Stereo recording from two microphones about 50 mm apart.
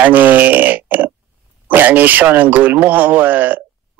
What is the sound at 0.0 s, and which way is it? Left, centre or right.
Speech, right.